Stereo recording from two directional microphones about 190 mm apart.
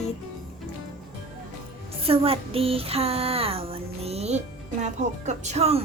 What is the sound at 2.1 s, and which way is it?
Female singing, 30° right (ahead or behind).